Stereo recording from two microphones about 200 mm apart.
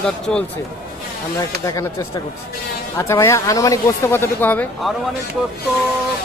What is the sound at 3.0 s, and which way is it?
Speech, 15° left (ahead or behind).